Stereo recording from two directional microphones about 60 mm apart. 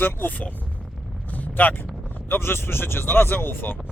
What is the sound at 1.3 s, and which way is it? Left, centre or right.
Vehicle, left.